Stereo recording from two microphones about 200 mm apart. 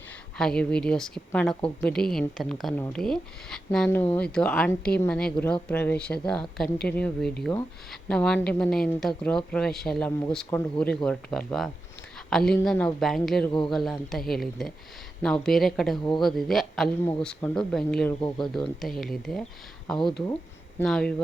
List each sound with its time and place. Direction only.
0.3 s speech: 5° left (ahead or behind)
20.7 s speech: 5° left (ahead or behind)